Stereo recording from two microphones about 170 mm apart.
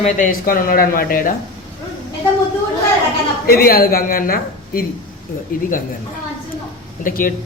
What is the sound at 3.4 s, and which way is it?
Speech, 60° left (ahead or behind).